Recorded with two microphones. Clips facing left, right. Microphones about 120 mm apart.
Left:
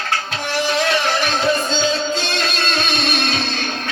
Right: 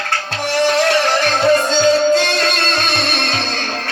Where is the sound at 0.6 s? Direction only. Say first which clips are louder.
Right 4 dB; 45° right (ahead or behind).